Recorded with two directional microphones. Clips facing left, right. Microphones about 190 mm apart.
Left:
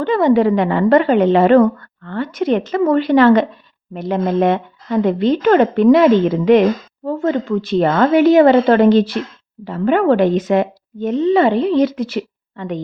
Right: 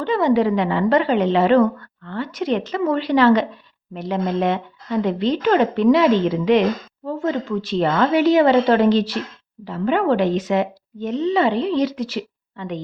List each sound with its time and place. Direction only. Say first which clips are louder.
0.0 s speech: left 4 dB; 50° left (ahead or behind)